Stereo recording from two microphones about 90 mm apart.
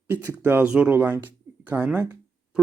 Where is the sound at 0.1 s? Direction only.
25° right (ahead or behind).